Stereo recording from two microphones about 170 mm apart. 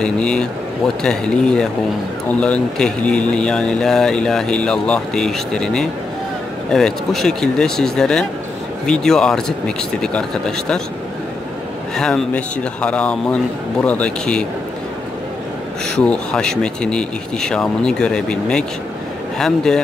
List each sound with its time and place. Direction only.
0.0 s speech: 5° left (ahead or behind)
12.0 s a man's voice: 5° left (ahead or behind)
16.0 s speech: 5° left (ahead or behind)